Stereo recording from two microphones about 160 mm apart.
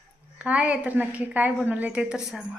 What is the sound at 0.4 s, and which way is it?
A woman's voice, 10° right (ahead or behind).